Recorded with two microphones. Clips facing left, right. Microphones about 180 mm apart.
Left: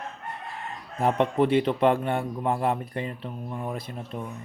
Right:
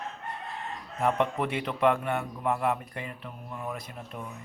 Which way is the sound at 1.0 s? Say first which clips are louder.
Left 4 dB; 30° left (ahead or behind).